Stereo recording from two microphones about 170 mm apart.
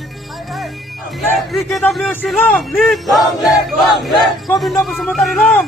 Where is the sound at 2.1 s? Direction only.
10° left (ahead or behind).